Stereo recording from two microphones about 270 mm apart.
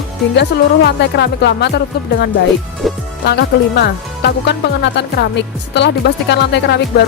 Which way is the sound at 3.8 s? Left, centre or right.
Left.